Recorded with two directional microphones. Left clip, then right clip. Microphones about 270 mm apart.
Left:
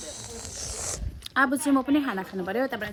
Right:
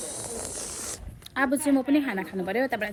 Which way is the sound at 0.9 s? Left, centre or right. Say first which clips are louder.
Left 4 dB; centre.